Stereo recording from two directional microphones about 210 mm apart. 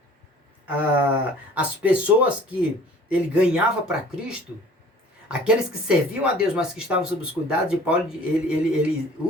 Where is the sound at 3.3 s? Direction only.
5° right (ahead or behind).